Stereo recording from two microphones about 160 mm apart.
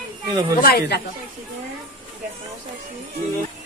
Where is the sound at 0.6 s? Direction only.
70° left (ahead or behind).